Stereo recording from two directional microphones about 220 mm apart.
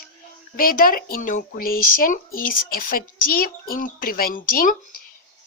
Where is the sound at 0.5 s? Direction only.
40° left (ahead or behind).